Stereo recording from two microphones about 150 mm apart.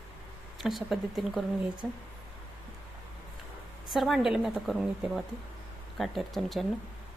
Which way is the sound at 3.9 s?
Centre (ahead or behind).